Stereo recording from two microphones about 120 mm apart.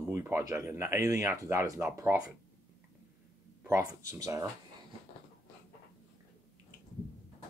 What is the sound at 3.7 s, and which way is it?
Speech, 25° right (ahead or behind).